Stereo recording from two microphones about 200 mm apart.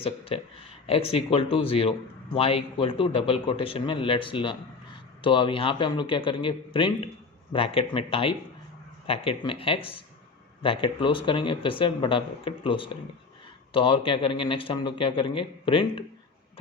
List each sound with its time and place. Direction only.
0.3 s speech: 30° left (ahead or behind)